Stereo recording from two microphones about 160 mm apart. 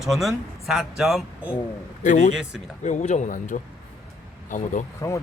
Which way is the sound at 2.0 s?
50° left (ahead or behind).